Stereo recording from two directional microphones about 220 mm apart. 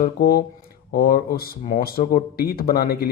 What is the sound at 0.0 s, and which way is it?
Speech, 45° left (ahead or behind).